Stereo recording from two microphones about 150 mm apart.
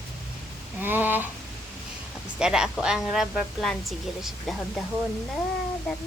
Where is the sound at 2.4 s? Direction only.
5° right (ahead or behind).